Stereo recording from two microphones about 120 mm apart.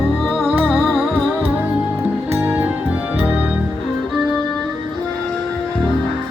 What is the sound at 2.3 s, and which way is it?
Music, 15° right (ahead or behind).